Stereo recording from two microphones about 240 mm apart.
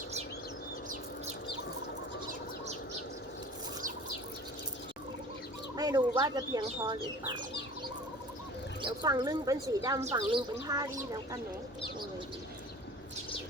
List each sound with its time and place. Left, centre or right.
5.7 s speech: centre
8.8 s speech: centre